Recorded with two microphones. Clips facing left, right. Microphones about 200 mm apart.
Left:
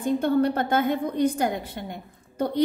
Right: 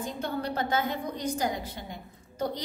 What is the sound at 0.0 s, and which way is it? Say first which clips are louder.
A woman's voice: left 11 dB; 55° left (ahead or behind).